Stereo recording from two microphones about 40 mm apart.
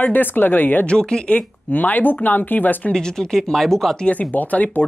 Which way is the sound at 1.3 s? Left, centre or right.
Left.